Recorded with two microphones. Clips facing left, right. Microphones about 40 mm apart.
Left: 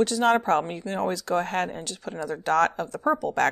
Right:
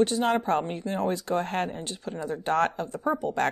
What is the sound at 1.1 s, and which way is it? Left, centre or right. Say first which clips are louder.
Speech: left 2 dB; left.